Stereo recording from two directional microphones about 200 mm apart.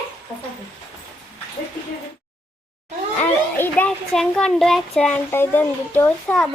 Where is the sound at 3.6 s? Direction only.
5° left (ahead or behind).